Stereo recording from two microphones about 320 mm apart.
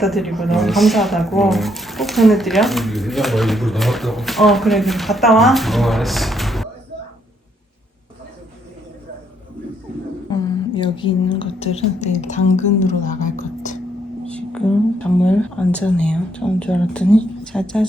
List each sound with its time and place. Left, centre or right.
0.0 s speech: centre
10.2 s a woman's voice: centre
14.3 s speech: centre